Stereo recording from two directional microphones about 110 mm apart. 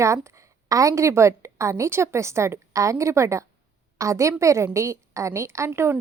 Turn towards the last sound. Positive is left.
turn(degrees=-20)  # may be behind; listen again after turning